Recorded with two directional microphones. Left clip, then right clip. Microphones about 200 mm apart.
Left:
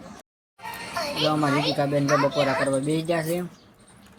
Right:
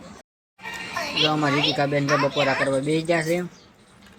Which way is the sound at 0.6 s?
45° left (ahead or behind).